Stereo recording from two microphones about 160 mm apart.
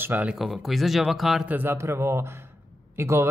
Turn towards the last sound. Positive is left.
turn(degrees=-15)  # may be behind; listen again after turning